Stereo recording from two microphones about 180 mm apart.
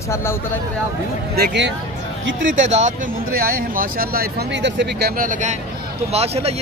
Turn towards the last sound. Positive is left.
turn(degrees=-35)  # may be behind; listen again after turning